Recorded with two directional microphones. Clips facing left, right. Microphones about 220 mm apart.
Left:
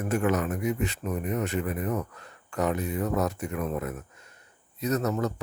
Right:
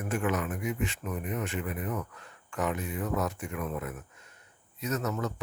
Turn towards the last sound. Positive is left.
turn(degrees=40)  # may be behind; listen again after turning